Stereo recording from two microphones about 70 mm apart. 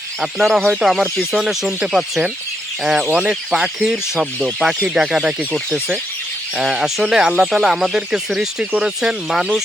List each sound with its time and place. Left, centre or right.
0.2 s speech: centre
5.4 s speech: centre
6.6 s speech: centre